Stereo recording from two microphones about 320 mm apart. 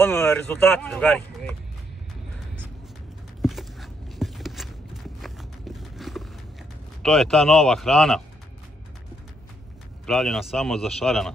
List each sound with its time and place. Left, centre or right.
0.0 s speech: centre
3.4 s walk: centre
7.0 s speech: centre
10.0 s speech: centre